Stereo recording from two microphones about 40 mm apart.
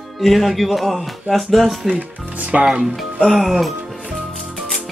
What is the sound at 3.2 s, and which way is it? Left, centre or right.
Speech, centre.